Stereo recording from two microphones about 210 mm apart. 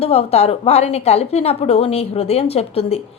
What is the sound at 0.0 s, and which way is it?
A woman's voice, 30° left (ahead or behind).